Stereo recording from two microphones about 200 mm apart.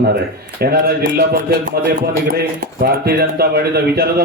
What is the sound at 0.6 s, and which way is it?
Speech, 50° right (ahead or behind).